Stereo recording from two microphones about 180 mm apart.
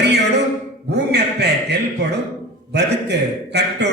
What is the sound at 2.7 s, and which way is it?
A man's voice, 70° right (ahead or behind).